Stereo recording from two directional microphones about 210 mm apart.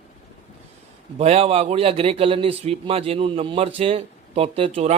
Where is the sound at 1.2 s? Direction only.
30° right (ahead or behind).